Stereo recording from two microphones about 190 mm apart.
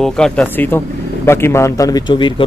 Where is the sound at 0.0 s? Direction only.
5° left (ahead or behind).